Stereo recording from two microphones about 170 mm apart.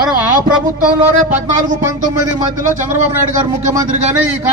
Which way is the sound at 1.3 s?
50° right (ahead or behind).